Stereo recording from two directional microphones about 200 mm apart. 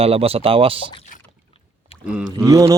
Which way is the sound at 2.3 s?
15° right (ahead or behind).